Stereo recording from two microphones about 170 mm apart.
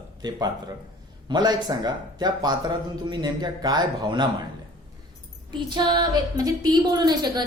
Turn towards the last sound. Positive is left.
turn(degrees=-25)  # may be behind; listen again after turning